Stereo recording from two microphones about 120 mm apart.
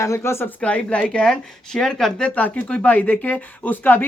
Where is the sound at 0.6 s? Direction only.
10° left (ahead or behind).